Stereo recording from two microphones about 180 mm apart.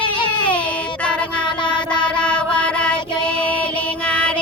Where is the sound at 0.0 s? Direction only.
25° left (ahead or behind).